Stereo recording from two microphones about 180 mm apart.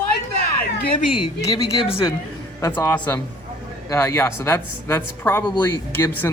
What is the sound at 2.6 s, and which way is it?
Speech, 15° left (ahead or behind).